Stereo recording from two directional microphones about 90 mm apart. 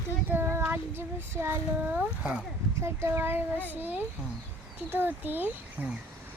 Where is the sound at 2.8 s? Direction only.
30° right (ahead or behind).